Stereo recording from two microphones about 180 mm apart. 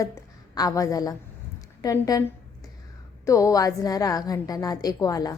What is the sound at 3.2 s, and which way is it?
A woman's voice, 20° left (ahead or behind).